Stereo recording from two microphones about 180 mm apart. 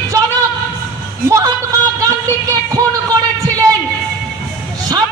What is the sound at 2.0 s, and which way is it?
Speech, 20° right (ahead or behind).